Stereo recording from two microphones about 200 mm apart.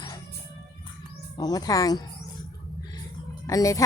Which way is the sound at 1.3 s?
20° left (ahead or behind).